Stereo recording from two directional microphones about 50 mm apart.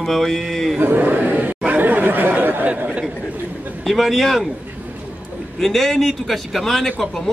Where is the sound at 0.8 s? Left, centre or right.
Right.